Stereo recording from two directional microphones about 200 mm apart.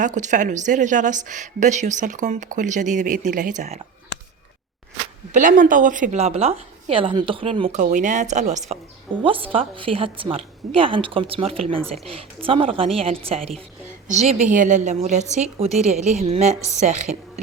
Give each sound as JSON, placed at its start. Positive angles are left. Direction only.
{"t": 0.0, "sound": "speech", "side_deg": -40}
{"t": 5.3, "sound": "a woman's voice", "side_deg": -40}